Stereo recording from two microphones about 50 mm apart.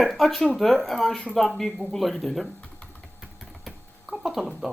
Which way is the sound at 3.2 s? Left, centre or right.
Centre.